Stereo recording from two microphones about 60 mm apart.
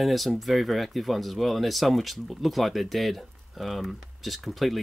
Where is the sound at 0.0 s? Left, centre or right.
Centre.